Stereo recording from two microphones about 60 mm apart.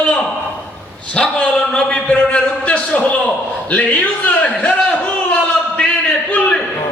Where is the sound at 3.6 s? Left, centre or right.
Left.